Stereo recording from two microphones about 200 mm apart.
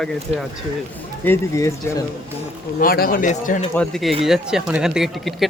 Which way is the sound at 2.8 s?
45° left (ahead or behind).